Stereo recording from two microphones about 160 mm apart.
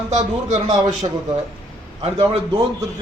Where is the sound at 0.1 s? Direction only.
50° right (ahead or behind).